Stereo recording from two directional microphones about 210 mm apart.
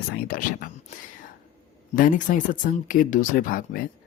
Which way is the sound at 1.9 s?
40° left (ahead or behind).